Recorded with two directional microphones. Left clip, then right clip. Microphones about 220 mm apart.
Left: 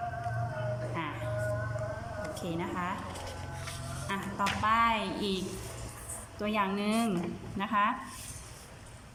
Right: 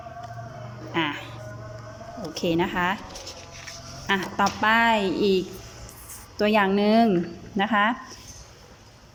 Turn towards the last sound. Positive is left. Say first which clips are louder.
# right 7 dB
turn(degrees=-35)  # may be behind; listen again after turning